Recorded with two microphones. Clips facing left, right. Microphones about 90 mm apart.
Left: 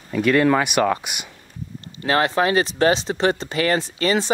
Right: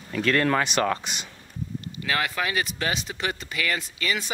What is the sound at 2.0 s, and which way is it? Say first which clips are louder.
Speech: left 9 dB; 35° left (ahead or behind).